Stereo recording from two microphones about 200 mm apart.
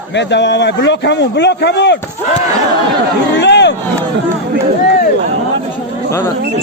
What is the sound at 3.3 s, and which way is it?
Crowd, 60° left (ahead or behind).